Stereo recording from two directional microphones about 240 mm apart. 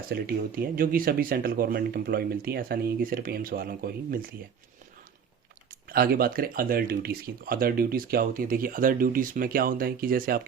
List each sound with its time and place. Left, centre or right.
0.1 s speech: right
5.9 s speech: right